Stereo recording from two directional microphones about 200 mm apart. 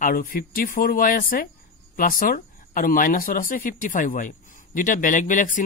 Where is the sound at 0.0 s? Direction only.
45° left (ahead or behind).